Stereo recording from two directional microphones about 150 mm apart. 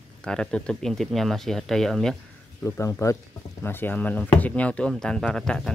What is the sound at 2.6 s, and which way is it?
Speech, 20° left (ahead or behind).